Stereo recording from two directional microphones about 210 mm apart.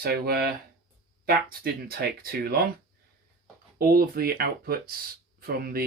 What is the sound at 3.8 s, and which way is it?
Speech, 45° right (ahead or behind).